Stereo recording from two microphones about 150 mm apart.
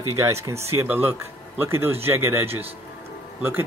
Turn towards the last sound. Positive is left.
turn(degrees=-15)  # may be behind; listen again after turning